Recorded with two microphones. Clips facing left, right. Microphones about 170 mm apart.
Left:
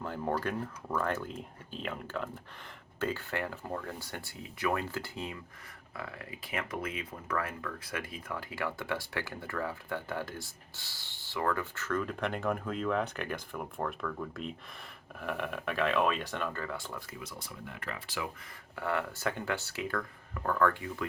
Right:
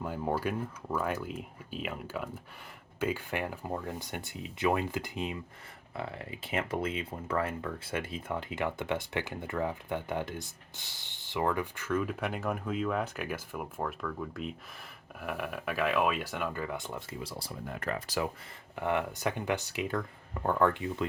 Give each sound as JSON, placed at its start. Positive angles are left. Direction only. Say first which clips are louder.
{"t": 0.0, "sound": "speech", "louder": "right 1 dB", "side_deg": -10}
{"t": 18.8, "sound": "speech", "louder": "right 3 dB", "side_deg": -20}